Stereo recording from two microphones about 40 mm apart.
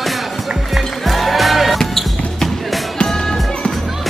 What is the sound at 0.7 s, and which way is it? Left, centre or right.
Music, centre.